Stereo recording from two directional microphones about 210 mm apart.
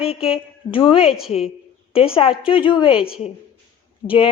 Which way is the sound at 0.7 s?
25° left (ahead or behind).